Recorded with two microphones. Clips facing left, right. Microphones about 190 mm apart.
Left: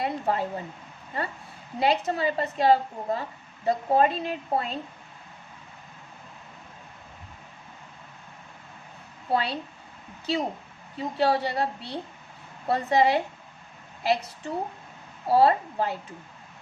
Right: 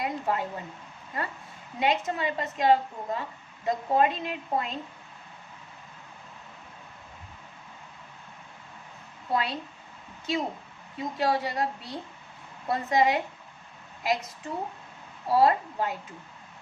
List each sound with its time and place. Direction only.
0.0 s a woman's voice: 30° left (ahead or behind)
1.8 s a woman's voice: 35° left (ahead or behind)
9.3 s a woman's voice: 30° left (ahead or behind)